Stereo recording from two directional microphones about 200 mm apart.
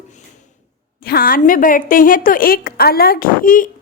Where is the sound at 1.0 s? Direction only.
50° left (ahead or behind).